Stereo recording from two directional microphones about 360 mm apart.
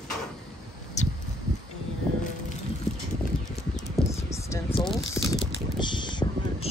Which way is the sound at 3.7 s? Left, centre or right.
Centre.